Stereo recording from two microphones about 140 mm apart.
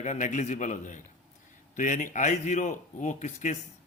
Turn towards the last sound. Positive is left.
turn(degrees=60)  # may be behind; listen again after turning